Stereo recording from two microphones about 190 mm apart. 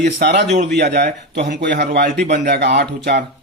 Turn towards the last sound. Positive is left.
turn(degrees=-60)  # may be behind; listen again after turning